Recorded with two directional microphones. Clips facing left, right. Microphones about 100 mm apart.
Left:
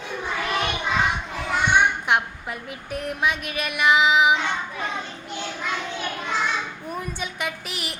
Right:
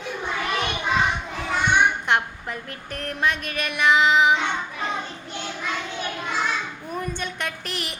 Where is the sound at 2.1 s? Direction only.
5° left (ahead or behind).